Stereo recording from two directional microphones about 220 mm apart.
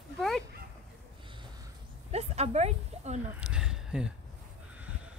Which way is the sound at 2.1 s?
30° right (ahead or behind).